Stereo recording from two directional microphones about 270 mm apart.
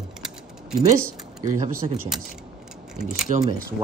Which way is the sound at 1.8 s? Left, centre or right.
Right.